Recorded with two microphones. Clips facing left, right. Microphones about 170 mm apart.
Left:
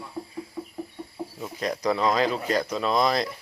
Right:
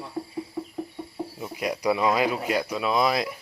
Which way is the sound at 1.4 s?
10° right (ahead or behind).